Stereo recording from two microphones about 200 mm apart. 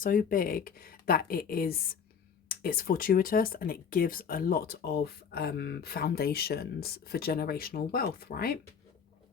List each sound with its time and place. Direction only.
0.0 s speech: 45° left (ahead or behind)